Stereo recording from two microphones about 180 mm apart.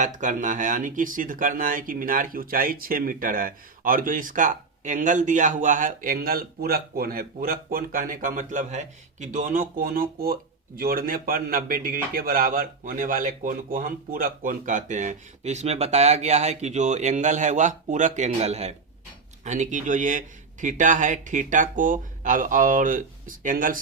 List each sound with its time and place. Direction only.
0.0 s a man's voice: 45° right (ahead or behind)